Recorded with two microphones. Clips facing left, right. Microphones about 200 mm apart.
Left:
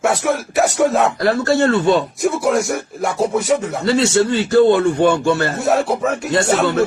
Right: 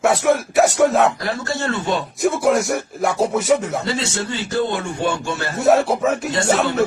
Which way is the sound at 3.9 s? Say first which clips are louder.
Left 9 dB; 60° left (ahead or behind).